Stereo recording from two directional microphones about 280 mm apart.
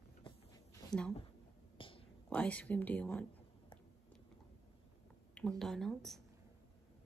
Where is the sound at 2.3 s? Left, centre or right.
Centre.